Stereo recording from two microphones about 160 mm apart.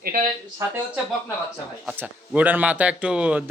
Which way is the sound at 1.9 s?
10° right (ahead or behind).